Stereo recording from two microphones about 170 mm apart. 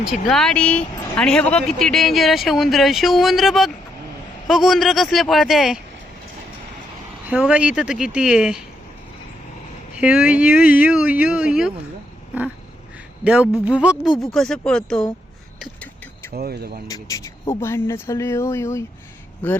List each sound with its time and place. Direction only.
0.0 s speech: centre (ahead or behind)
7.3 s speech: 5° right (ahead or behind)
9.9 s speech: 5° right (ahead or behind)
13.2 s speech: 5° right (ahead or behind)
14.1 s speech: 30° left (ahead or behind)
14.3 s speech: centre (ahead or behind)
16.3 s speech: 65° right (ahead or behind)
16.9 s a man's voice: 20° left (ahead or behind)